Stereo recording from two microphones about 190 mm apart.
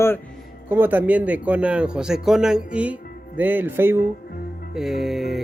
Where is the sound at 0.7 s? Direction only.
10° right (ahead or behind).